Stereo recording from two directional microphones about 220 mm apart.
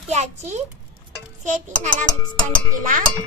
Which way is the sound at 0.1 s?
30° right (ahead or behind).